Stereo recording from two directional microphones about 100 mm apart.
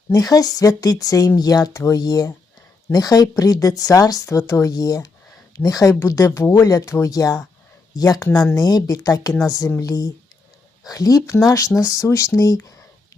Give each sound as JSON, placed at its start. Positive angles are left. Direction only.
{"t": 0.1, "sound": "speech", "side_deg": 40}